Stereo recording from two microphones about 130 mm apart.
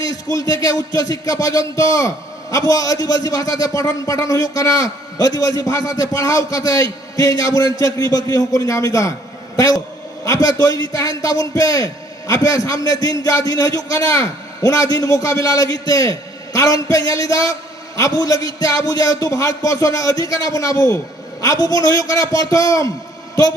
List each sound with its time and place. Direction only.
0.0 s a man's voice: 25° left (ahead or behind)
10.2 s a man's voice: 25° left (ahead or behind)